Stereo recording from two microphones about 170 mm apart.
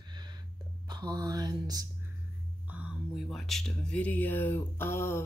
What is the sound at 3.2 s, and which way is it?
Speech, centre (ahead or behind).